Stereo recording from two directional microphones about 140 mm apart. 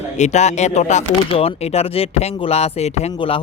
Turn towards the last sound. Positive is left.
turn(degrees=45)  # may be behind; listen again after turning